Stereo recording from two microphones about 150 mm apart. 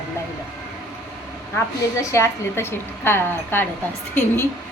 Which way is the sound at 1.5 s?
20° left (ahead or behind).